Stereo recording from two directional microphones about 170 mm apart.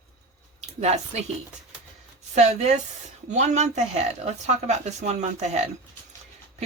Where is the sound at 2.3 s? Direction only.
40° right (ahead or behind).